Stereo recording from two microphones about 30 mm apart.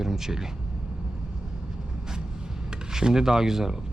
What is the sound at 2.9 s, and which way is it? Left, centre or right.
Speech, centre.